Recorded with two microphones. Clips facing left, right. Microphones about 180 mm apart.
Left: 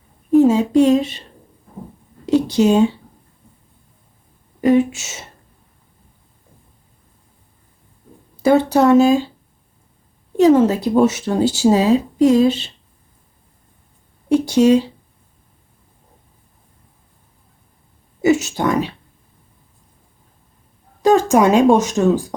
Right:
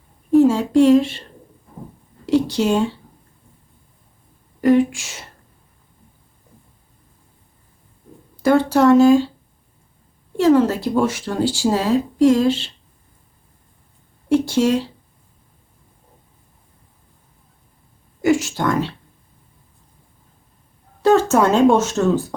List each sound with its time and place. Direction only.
0.4 s speech: 20° left (ahead or behind)
2.2 s speech: 15° left (ahead or behind)
4.6 s speech: 20° left (ahead or behind)
8.4 s speech: 15° left (ahead or behind)
10.3 s speech: 20° left (ahead or behind)
14.3 s speech: 15° left (ahead or behind)
18.2 s speech: 20° left (ahead or behind)
21.0 s speech: 15° left (ahead or behind)